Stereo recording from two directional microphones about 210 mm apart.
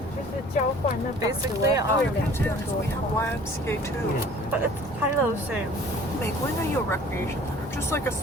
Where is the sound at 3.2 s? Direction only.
10° left (ahead or behind).